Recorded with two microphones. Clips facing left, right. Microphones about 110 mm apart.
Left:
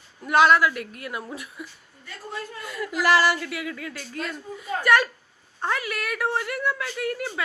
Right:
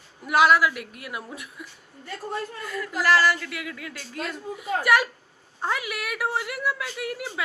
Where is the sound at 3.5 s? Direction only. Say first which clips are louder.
Left 3 dB; centre (ahead or behind).